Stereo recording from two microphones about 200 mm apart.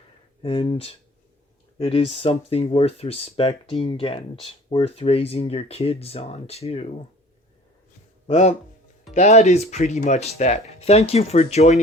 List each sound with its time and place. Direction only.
0.4 s speech: 30° left (ahead or behind)
8.3 s speech: 35° left (ahead or behind)